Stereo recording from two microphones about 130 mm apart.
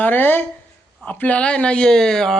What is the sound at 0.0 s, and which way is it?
Speech, 15° left (ahead or behind).